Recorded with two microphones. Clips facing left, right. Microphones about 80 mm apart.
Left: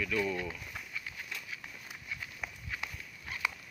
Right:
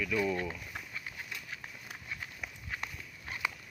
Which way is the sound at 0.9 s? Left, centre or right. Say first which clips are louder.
Even; right.